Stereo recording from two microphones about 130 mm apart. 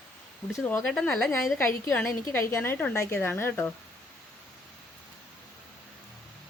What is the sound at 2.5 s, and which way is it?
A woman's voice, 20° left (ahead or behind).